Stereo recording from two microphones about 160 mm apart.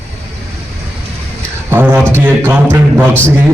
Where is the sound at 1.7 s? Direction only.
15° right (ahead or behind).